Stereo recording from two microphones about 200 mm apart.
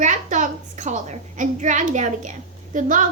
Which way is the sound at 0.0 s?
40° right (ahead or behind).